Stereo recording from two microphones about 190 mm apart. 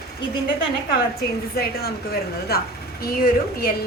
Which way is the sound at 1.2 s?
55° left (ahead or behind).